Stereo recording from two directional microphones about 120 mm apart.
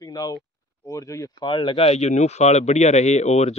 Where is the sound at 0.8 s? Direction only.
25° left (ahead or behind).